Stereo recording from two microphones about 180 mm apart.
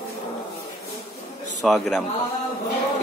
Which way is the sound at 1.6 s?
Centre (ahead or behind).